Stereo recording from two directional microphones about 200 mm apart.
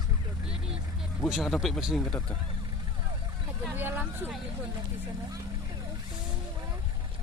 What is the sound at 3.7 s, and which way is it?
Vehicle, 10° right (ahead or behind).